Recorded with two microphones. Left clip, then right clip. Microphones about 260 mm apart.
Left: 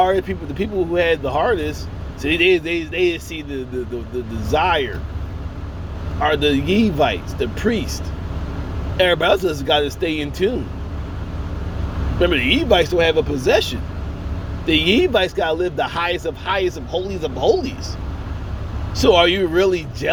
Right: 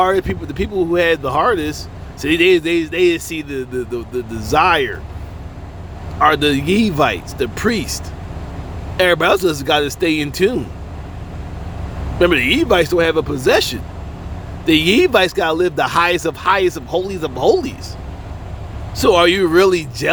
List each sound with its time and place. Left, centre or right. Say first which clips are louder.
0.0 s speech: right 2 dB; right
6.1 s speech: right 4 dB; right
12.2 s speech: right 3 dB; right
18.9 s speech: right 2 dB; right